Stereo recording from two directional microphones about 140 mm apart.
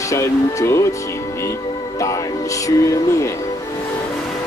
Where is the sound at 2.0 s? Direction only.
25° left (ahead or behind).